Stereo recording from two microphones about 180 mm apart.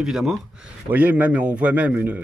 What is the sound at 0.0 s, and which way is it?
Speech, centre (ahead or behind).